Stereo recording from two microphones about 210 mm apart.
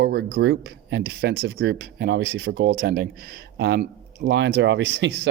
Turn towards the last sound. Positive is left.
turn(degrees=-55)  # may be behind; listen again after turning